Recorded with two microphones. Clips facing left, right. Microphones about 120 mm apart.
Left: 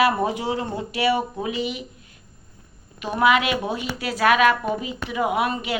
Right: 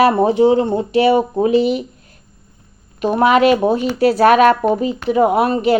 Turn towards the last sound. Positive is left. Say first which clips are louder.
# right 9 dB
turn(degrees=-35)  # may be behind; listen again after turning